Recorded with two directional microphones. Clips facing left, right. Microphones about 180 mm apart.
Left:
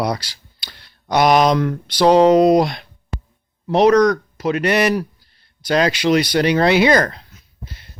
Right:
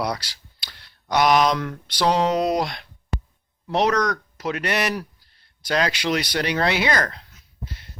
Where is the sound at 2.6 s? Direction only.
20° left (ahead or behind).